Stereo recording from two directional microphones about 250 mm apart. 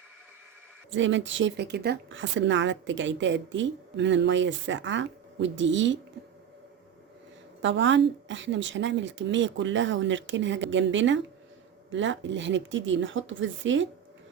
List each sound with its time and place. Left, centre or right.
0.9 s speech: right
7.6 s speech: right